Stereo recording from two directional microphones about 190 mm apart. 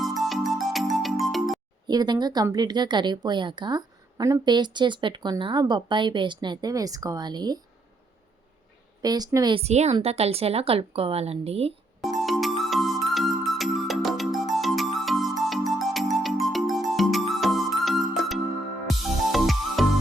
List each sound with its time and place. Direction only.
0.0 s music: centre (ahead or behind)
1.9 s speech: 20° right (ahead or behind)
9.0 s a woman's voice: 20° right (ahead or behind)
12.0 s music: centre (ahead or behind)